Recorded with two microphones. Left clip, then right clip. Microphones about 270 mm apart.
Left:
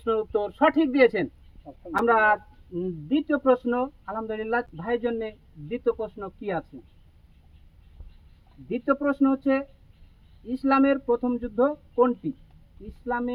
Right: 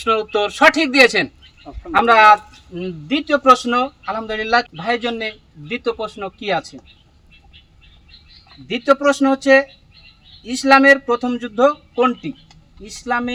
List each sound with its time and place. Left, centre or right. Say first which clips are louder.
0.0 s speech: right 8 dB; right
8.7 s speech: right 10 dB; centre